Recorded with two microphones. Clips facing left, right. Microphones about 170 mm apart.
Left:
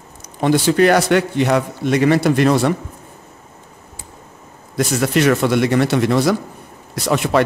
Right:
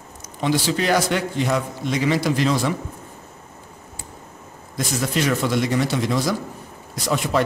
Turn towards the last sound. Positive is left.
turn(degrees=70)  # may be behind; listen again after turning